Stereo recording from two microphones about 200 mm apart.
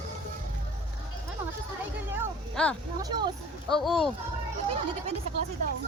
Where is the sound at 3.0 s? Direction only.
20° right (ahead or behind).